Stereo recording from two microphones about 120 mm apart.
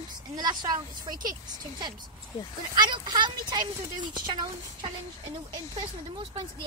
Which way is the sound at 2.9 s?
35° right (ahead or behind).